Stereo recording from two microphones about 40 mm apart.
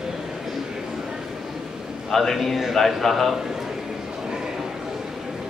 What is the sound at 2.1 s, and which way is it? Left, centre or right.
A man's voice, centre.